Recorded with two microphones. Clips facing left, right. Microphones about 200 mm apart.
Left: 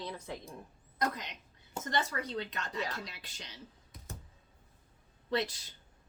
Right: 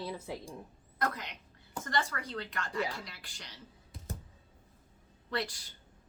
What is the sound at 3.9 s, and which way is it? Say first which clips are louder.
Computer keyboard: right 7 dB; 30° right (ahead or behind).